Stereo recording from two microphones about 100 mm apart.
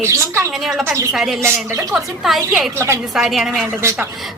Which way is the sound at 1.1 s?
5° right (ahead or behind).